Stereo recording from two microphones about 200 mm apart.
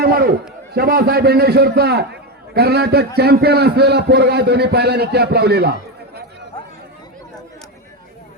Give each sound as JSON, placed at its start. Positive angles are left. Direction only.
{"t": 0.0, "sound": "a man's voice", "side_deg": -50}